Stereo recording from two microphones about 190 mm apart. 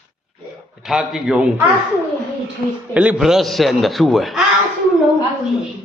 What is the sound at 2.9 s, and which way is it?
A man's voice, 5° right (ahead or behind).